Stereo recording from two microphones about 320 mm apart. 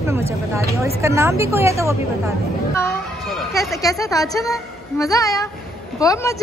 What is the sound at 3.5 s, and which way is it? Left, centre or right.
Speech, centre.